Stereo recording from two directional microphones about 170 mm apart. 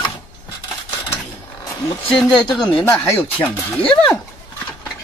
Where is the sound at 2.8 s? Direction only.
15° left (ahead or behind).